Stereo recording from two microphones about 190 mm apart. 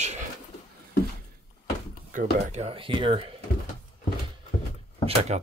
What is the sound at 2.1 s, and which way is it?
Speech, 35° right (ahead or behind).